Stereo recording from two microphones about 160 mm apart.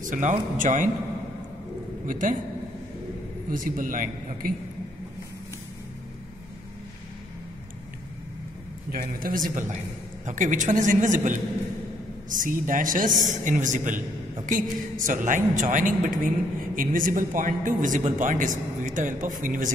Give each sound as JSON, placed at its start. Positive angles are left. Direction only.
{"t": 0.0, "sound": "speech", "side_deg": -50}
{"t": 2.0, "sound": "a man's voice", "side_deg": -55}
{"t": 3.4, "sound": "speech", "side_deg": -60}
{"t": 8.9, "sound": "a woman's voice", "side_deg": -60}